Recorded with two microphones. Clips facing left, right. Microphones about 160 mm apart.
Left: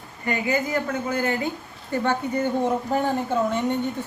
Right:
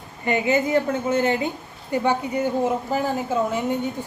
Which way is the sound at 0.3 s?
20° right (ahead or behind).